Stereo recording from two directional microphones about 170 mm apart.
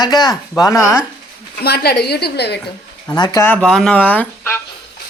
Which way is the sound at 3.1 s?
25° left (ahead or behind).